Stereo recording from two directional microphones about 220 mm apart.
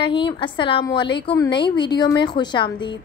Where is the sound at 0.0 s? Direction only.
20° left (ahead or behind).